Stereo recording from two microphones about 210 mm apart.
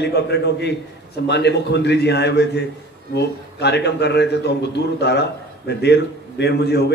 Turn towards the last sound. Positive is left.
turn(degrees=50)  # may be behind; listen again after turning